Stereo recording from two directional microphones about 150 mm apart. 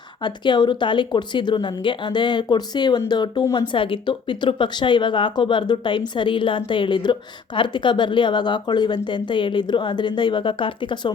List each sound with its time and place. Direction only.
0.4 s speech: 30° left (ahead or behind)
3.7 s speech: 35° left (ahead or behind)